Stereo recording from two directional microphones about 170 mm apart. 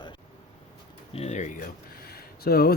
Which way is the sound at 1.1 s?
40° left (ahead or behind).